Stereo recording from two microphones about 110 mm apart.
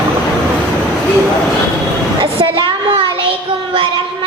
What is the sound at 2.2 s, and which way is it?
Child singing, 50° right (ahead or behind).